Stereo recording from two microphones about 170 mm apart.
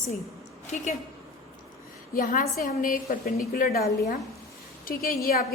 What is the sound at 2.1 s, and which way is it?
A woman's voice, 55° left (ahead or behind).